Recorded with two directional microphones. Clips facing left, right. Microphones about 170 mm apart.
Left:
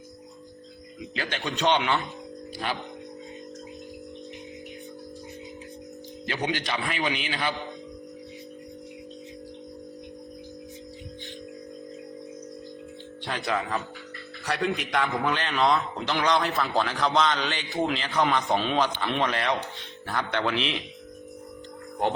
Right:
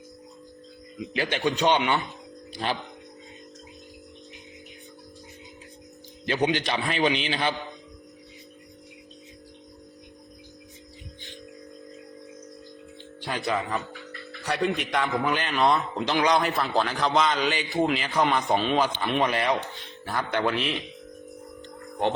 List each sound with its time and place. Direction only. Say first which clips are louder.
1.1 s a man's voice: right 5 dB; 20° right (ahead or behind)
1.5 s speech: right 2 dB; centre (ahead or behind)
6.2 s a man's voice: right 5 dB; 20° right (ahead or behind)
13.2 s speech: right 1 dB; centre (ahead or behind)
16.0 s a man's voice: right 3 dB; 20° right (ahead or behind)
16.5 s speech: right 1 dB; centre (ahead or behind)